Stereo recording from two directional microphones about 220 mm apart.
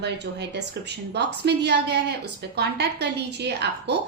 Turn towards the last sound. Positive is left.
turn(degrees=-50)  # may be behind; listen again after turning